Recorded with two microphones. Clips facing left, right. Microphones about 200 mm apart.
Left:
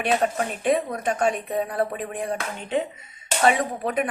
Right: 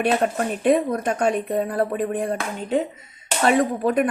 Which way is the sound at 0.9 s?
45° right (ahead or behind).